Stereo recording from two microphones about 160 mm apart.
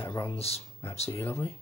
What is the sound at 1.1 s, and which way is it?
Speech, 15° left (ahead or behind).